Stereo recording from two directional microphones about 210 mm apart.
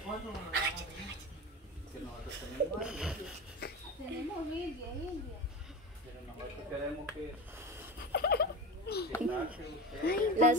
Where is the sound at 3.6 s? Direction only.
45° left (ahead or behind).